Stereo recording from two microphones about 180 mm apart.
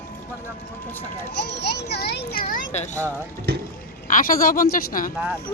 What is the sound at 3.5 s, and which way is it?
Speech, 60° right (ahead or behind).